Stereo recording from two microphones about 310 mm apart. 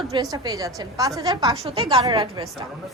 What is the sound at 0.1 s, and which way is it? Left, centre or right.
A woman's voice, centre.